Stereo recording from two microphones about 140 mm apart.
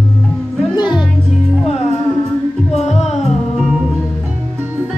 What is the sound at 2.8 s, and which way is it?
Music, 50° left (ahead or behind).